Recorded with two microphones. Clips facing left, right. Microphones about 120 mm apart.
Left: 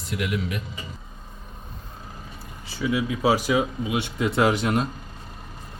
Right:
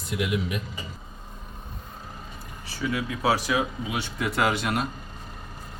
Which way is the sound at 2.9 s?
15° left (ahead or behind).